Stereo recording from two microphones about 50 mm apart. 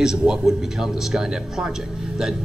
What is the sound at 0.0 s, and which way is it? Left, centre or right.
A man's voice, centre.